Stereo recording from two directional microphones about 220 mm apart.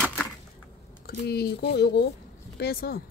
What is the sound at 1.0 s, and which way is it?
Speech, 45° left (ahead or behind).